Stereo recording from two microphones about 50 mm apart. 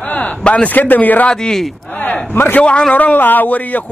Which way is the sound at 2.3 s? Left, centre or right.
Left.